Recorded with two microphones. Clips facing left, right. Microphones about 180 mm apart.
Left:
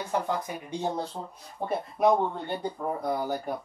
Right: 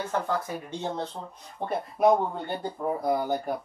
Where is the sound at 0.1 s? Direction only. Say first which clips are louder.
Left 2 dB; 15° left (ahead or behind).